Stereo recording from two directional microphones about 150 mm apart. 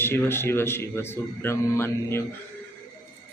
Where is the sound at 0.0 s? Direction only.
15° left (ahead or behind).